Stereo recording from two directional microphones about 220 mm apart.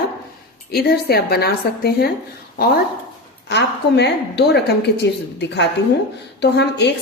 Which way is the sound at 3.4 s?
50° left (ahead or behind).